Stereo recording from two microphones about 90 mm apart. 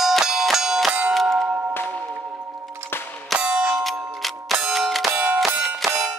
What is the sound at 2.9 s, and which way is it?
Clang, 20° left (ahead or behind).